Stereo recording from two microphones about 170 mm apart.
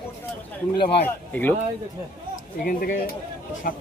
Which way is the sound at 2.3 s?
55° left (ahead or behind).